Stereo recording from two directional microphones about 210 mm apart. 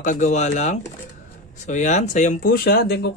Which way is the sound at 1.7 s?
35° left (ahead or behind).